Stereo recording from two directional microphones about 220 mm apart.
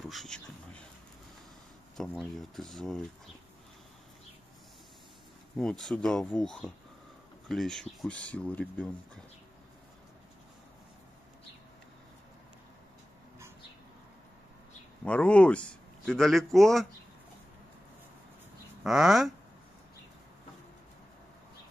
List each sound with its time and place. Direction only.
0.0 s speech: centre (ahead or behind)
2.0 s speech: centre (ahead or behind)
5.6 s speech: centre (ahead or behind)
15.0 s speech: 5° left (ahead or behind)
18.9 s speech: centre (ahead or behind)